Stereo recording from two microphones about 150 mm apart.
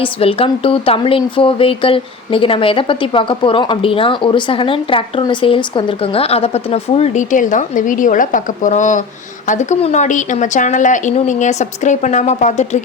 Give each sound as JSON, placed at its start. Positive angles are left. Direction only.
{"t": 0.0, "sound": "speech", "side_deg": 40}